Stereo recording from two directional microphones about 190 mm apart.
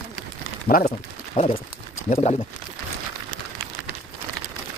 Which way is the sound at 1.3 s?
30° left (ahead or behind).